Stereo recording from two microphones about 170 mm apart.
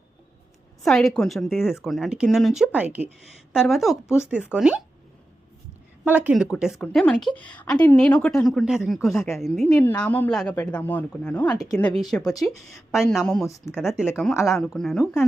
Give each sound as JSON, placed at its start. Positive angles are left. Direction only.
{"t": 0.8, "sound": "a woman's voice", "side_deg": 0}
{"t": 6.1, "sound": "a woman's voice", "side_deg": -10}
{"t": 12.3, "sound": "speech", "side_deg": 20}
{"t": 12.5, "sound": "a woman's voice", "side_deg": 0}